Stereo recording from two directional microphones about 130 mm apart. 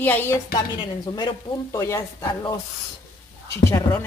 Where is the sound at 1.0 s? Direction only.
35° left (ahead or behind).